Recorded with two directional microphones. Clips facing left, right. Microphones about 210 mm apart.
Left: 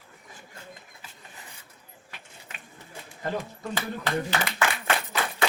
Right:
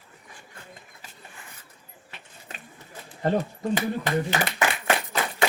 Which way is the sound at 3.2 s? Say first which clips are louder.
Right 7 dB; 35° right (ahead or behind).